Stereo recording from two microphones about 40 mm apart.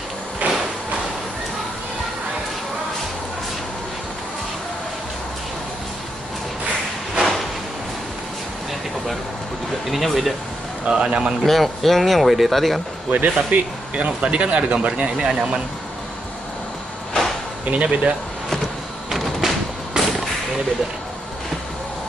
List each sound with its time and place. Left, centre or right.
0.4 s a sound: right
7.2 s a sound: centre
9.8 s speech: centre
10.9 s speech: right
11.4 s speech: centre
13.1 s speech: right
17.6 s speech: right
19.4 s music: centre